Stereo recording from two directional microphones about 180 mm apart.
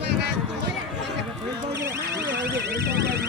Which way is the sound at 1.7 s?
15° right (ahead or behind).